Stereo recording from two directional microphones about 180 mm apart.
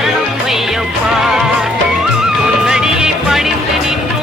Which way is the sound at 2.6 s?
5° right (ahead or behind).